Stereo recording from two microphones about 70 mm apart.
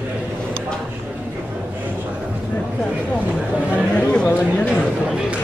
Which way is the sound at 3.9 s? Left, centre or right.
Centre.